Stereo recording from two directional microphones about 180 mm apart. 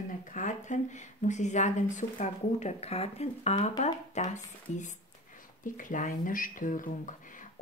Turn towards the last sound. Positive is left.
turn(degrees=45)  # may be behind; listen again after turning